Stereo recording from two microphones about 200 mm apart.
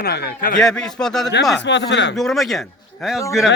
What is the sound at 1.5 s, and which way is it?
Speech, 65° left (ahead or behind).